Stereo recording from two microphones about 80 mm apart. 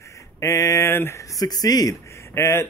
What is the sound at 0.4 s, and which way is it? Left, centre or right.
Speech, left.